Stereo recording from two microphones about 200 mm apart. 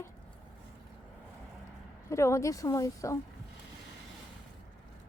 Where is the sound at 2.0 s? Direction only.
15° left (ahead or behind).